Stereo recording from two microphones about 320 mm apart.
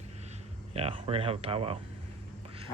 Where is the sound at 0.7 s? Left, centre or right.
Centre.